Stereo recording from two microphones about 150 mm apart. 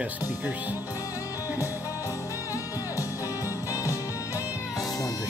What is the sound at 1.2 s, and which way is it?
Music, 20° left (ahead or behind).